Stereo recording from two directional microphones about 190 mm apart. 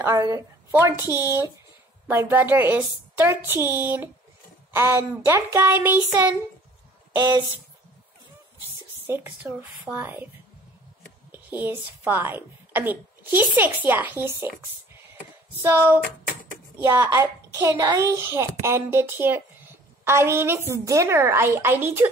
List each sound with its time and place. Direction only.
0.0 s a woman's voice: 15° right (ahead or behind)
9.0 s a child's voice: 10° right (ahead or behind)
11.3 s a woman's voice: 10° right (ahead or behind)
15.6 s a child's voice: 15° right (ahead or behind)